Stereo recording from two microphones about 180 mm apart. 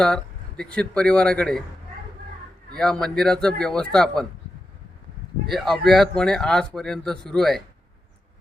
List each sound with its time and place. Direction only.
0.0 s speech: 5° left (ahead or behind)
2.7 s speech: 5° left (ahead or behind)
5.5 s speech: centre (ahead or behind)